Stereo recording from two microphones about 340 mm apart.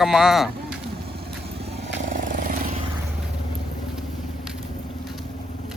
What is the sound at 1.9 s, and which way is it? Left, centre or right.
Vehicle, right.